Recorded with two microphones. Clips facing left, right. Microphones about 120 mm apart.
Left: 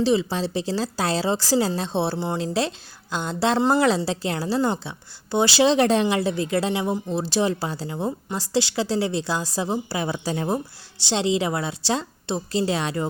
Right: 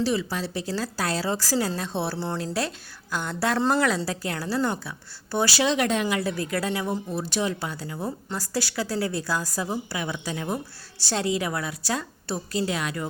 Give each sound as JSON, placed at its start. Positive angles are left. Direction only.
{"t": 0.0, "sound": "a woman's voice", "side_deg": 25}
{"t": 10.9, "sound": "a woman's voice", "side_deg": 20}